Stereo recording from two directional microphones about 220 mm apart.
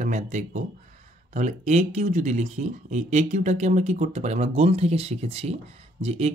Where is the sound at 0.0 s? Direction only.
35° right (ahead or behind).